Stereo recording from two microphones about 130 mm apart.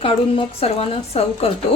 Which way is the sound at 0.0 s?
45° left (ahead or behind).